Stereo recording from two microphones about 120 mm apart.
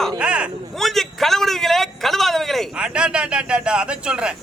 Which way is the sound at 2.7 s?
10° right (ahead or behind).